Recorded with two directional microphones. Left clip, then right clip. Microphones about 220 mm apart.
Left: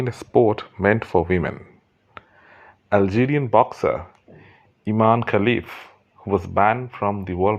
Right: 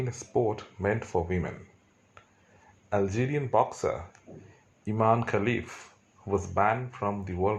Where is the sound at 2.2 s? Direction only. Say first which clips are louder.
Left 13 dB; 40° left (ahead or behind).